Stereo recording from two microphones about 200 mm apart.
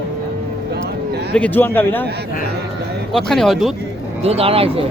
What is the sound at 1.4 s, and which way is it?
Speech, 10° left (ahead or behind).